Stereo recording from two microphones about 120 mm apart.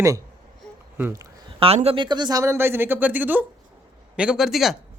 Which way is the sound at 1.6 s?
55° right (ahead or behind).